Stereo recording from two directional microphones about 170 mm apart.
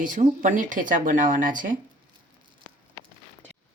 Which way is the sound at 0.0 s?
50° right (ahead or behind).